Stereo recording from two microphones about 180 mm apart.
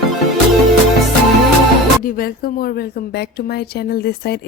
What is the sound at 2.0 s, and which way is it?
A woman's voice, 55° left (ahead or behind).